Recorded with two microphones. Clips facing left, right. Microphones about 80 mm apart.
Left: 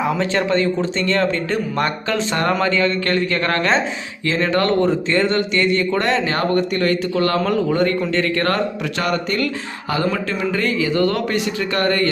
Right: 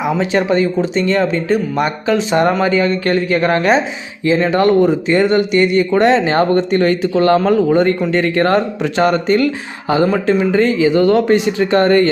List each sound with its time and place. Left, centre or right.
0.2 s speech: centre